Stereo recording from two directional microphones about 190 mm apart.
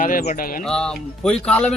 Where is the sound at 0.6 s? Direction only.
5° left (ahead or behind).